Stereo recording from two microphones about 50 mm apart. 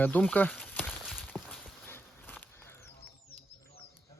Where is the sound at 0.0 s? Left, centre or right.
Left.